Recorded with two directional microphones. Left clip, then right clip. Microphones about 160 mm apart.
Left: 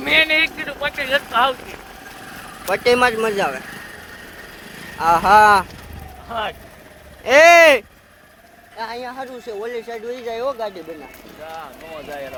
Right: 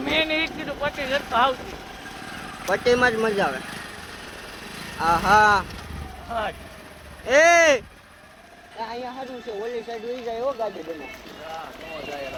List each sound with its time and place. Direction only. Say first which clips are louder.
0.0 s speech: left 7 dB; 90° left
2.6 s speech: left 4 dB; 20° left (ahead or behind)
4.9 s speech: left 6 dB; 15° left (ahead or behind)
7.3 s speech: left 6 dB; 25° left (ahead or behind)
8.8 s speech: left 4 dB; 35° left (ahead or behind)